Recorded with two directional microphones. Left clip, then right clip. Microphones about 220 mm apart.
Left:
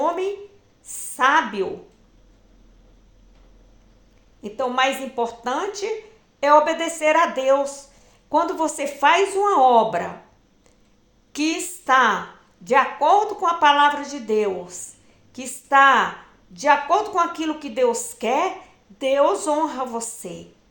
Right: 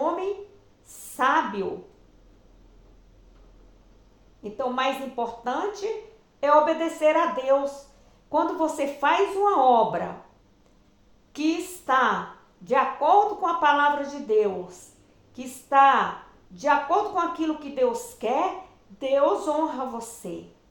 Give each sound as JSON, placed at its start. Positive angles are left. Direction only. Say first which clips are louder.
{"t": 1.1, "sound": "a sound", "louder": "left 5 dB", "side_deg": 45}
{"t": 4.5, "sound": "a woman's voice", "louder": "left 5 dB", "side_deg": 45}
{"t": 11.3, "sound": "a woman's voice", "louder": "left 2 dB", "side_deg": 45}